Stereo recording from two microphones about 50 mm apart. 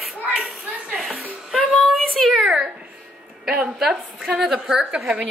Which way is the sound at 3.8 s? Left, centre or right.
Centre.